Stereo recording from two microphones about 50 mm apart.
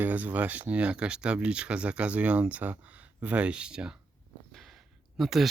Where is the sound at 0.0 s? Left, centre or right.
Right.